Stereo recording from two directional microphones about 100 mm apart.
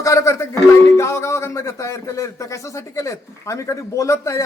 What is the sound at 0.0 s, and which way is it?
A man's voice, 30° left (ahead or behind).